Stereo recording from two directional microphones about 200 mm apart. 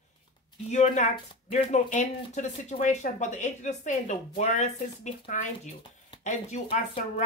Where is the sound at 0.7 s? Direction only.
35° left (ahead or behind).